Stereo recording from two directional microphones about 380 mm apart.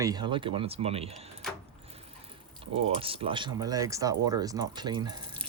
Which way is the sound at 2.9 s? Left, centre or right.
Centre.